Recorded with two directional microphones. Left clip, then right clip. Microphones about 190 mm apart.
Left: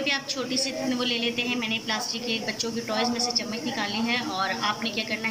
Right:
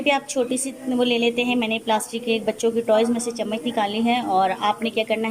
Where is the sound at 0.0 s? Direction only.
55° right (ahead or behind).